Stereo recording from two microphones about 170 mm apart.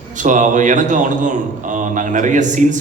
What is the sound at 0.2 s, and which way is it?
A man's voice, 50° right (ahead or behind).